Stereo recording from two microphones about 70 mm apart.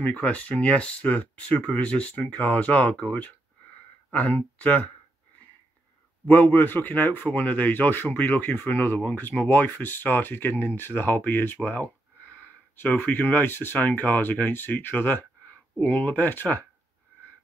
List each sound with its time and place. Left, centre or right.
0.0 s speech: left
6.2 s speech: left